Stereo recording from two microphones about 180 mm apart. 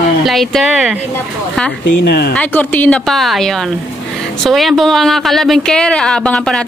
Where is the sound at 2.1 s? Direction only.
60° left (ahead or behind).